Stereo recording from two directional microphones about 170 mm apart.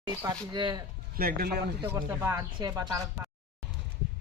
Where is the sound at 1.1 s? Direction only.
60° right (ahead or behind).